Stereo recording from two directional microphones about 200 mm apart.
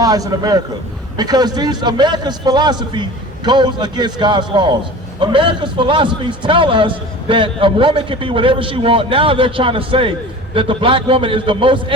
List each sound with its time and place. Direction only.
0.0 s a man's voice: 20° right (ahead or behind)